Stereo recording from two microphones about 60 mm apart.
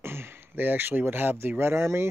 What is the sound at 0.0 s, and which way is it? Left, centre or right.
Speech, right.